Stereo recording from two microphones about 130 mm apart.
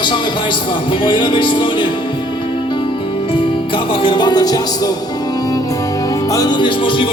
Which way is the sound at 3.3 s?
40° left (ahead or behind).